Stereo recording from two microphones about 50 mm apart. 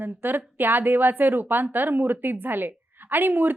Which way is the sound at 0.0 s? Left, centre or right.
Right.